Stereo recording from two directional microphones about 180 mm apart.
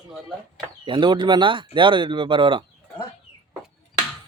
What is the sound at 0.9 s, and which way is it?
Speech, 25° right (ahead or behind).